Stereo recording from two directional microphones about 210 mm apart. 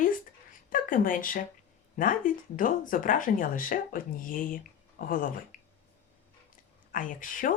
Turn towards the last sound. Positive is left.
turn(degrees=40)  # may be behind; listen again after turning